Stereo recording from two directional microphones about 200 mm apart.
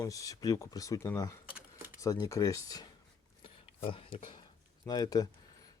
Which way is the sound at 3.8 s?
25° left (ahead or behind).